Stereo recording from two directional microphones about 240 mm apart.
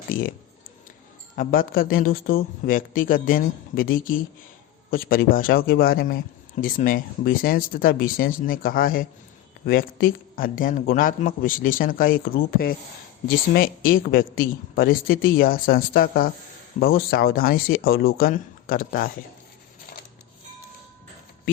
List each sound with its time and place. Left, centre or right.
0.1 s speech: left
1.4 s speech: left